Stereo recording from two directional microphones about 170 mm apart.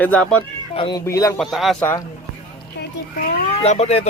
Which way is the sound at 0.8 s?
30° left (ahead or behind).